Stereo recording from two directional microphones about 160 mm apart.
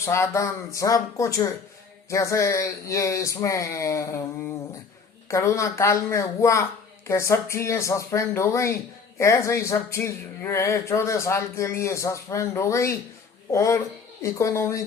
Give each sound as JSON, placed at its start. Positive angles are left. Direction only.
{"t": 0.0, "sound": "speech", "side_deg": 15}
{"t": 5.3, "sound": "speech", "side_deg": 20}